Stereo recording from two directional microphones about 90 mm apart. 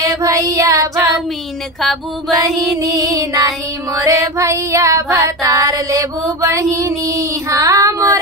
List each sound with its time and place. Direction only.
0.0 s child singing: 40° right (ahead or behind)
1.8 s music: centre (ahead or behind)
2.8 s female singing: 40° right (ahead or behind)